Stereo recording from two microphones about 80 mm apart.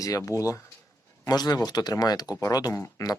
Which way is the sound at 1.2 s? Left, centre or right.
Left.